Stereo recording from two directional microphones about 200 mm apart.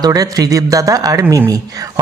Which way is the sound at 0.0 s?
20° right (ahead or behind).